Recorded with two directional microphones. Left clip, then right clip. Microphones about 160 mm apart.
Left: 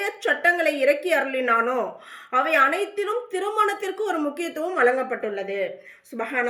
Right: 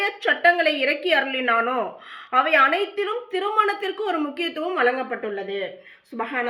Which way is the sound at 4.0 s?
25° right (ahead or behind).